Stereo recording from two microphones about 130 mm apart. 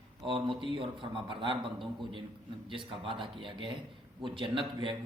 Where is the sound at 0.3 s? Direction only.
40° right (ahead or behind).